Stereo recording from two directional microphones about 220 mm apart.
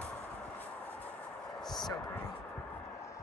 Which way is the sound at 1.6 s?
Centre (ahead or behind).